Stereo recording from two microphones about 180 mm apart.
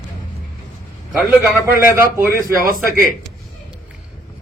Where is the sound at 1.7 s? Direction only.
15° right (ahead or behind).